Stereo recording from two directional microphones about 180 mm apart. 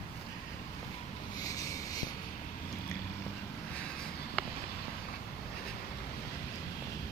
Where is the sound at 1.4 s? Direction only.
20° left (ahead or behind).